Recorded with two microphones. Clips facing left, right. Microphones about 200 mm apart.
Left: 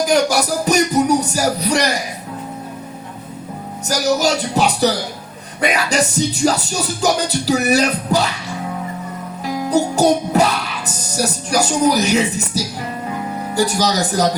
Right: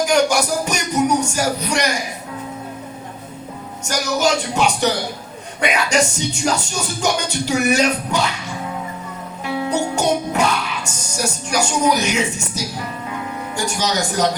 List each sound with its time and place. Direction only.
0.0 s speech: 35° left (ahead or behind)
3.8 s speech: 35° left (ahead or behind)
9.4 s music: 35° left (ahead or behind)
11.2 s speech: 35° left (ahead or behind)